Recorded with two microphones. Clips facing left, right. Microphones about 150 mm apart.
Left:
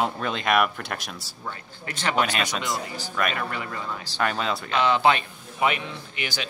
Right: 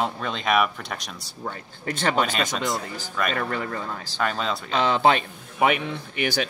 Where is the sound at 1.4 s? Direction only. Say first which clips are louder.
Right 5 dB; 50° right (ahead or behind).